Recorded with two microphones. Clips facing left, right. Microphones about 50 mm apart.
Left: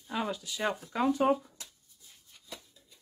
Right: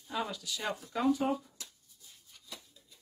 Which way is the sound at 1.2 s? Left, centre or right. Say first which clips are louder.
Left 6 dB; left.